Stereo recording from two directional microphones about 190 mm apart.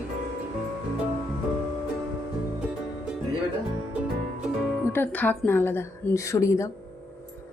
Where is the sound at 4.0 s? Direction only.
5° right (ahead or behind).